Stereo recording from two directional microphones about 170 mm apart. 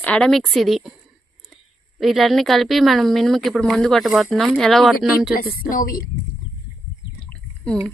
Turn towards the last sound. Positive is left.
turn(degrees=5)  # may be behind; listen again after turning